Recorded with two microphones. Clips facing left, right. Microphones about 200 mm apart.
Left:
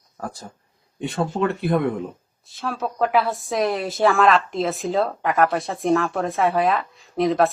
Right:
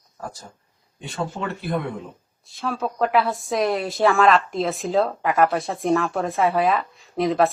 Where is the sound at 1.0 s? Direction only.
55° left (ahead or behind).